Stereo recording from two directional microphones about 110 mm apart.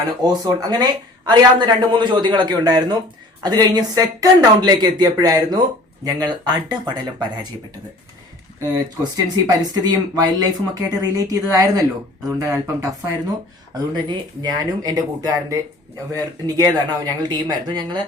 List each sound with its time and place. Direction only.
0.2 s speech: 35° right (ahead or behind)
8.7 s speech: 35° right (ahead or behind)
13.9 s speech: 40° right (ahead or behind)